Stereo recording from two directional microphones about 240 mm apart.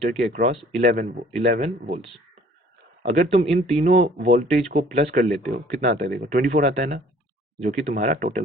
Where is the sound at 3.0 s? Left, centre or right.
Right.